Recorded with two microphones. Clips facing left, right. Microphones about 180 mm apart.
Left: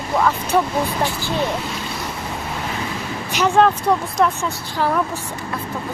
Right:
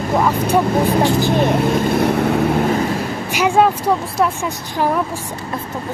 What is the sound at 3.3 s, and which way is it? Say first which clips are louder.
Speech: right 1 dB; 10° right (ahead or behind).